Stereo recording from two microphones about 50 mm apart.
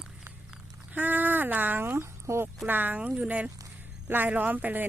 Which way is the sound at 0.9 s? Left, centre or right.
Right.